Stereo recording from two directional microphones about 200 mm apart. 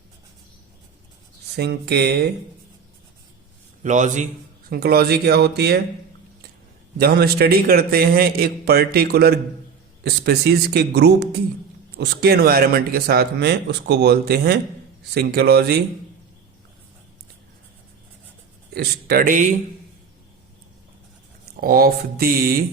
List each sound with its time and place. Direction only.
1.5 s a man's voice: 55° right (ahead or behind)
3.8 s a man's voice: 40° right (ahead or behind)
4.7 s speech: 50° right (ahead or behind)
7.0 s a man's voice: 50° right (ahead or behind)
18.7 s speech: 50° right (ahead or behind)
21.5 s speech: 45° right (ahead or behind)